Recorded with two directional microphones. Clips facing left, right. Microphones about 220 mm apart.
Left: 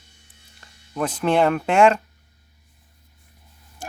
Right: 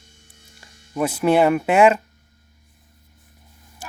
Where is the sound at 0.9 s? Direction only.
10° right (ahead or behind).